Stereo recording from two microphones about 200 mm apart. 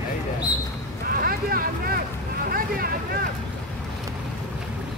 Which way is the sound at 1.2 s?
45° right (ahead or behind).